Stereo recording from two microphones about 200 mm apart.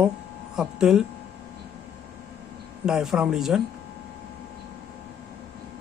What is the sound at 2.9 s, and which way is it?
Speech, centre (ahead or behind).